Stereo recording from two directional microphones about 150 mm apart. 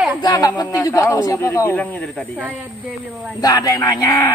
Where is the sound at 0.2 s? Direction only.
25° left (ahead or behind); by 2.4 s 10° left (ahead or behind).